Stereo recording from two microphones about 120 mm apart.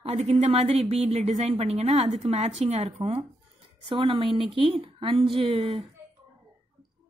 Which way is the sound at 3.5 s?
45° right (ahead or behind).